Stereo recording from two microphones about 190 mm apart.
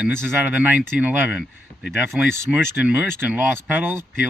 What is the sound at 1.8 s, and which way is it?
Speech, 65° left (ahead or behind).